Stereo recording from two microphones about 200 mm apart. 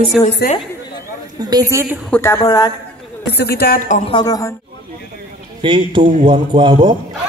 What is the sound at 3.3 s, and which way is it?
Speech, 55° left (ahead or behind).